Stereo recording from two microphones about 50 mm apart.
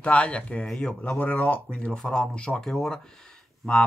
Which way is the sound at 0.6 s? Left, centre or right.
Centre.